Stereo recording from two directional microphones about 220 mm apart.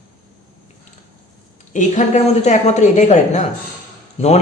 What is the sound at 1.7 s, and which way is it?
A man's voice, 35° left (ahead or behind).